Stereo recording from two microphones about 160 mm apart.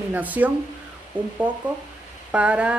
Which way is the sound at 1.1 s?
30° right (ahead or behind).